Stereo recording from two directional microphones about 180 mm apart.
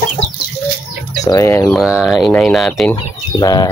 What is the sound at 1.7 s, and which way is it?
Speech, centre (ahead or behind).